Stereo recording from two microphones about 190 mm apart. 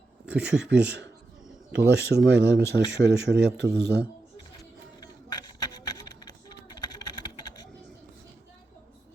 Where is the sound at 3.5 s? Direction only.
60° right (ahead or behind).